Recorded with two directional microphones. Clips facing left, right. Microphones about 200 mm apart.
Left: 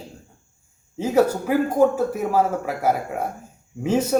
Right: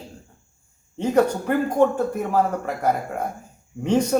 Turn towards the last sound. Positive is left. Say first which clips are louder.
# right 1 dB
turn(degrees=5)  # may be behind; listen again after turning